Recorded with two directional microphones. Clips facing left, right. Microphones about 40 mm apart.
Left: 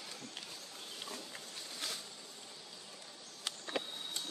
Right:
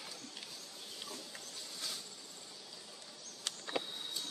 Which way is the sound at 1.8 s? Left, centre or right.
Left.